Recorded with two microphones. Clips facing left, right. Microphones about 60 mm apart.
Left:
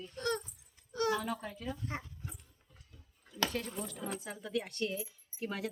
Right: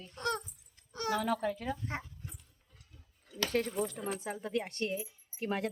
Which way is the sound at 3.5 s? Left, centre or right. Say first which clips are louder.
Right 7 dB; right.